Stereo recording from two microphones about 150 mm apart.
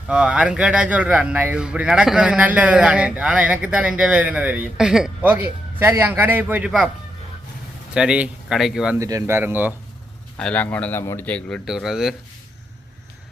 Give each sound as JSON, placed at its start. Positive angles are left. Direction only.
{"t": 0.1, "sound": "a man's voice", "side_deg": -5}
{"t": 7.9, "sound": "speech", "side_deg": -5}
{"t": 9.0, "sound": "a man's voice", "side_deg": -20}
{"t": 10.3, "sound": "speech", "side_deg": 10}
{"t": 11.3, "sound": "speech", "side_deg": 5}